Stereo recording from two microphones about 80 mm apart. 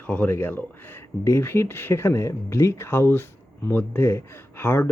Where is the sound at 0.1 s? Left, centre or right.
Centre.